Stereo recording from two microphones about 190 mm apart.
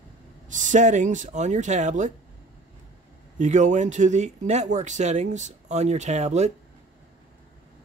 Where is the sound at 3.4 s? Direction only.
40° right (ahead or behind).